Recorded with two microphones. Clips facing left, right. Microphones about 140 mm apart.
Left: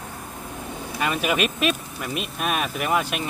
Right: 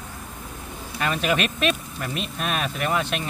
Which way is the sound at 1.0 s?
10° left (ahead or behind).